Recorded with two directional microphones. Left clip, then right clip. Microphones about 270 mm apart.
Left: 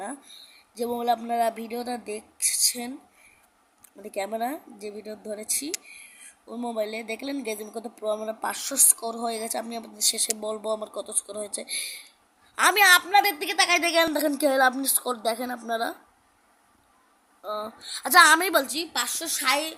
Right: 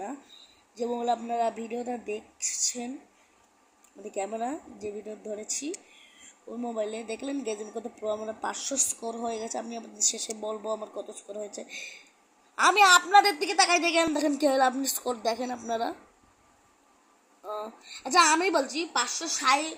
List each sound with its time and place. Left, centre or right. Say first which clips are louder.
0.8 s a woman's voice: left 3 dB; left
4.0 s a woman's voice: left 3 dB; left
17.4 s a woman's voice: left 4 dB; centre